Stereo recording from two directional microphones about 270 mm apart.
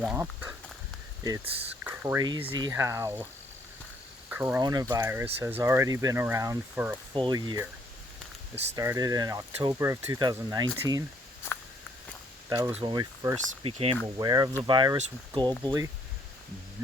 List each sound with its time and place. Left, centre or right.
0.0 s speech: centre
1.8 s speech: centre
4.3 s speech: centre
8.7 s speech: centre
12.5 s speech: centre